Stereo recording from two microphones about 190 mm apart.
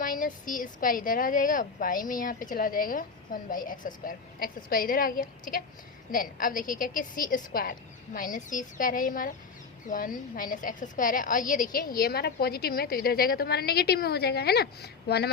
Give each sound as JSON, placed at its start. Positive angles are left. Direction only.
{"t": 0.0, "sound": "a woman's voice", "side_deg": 45}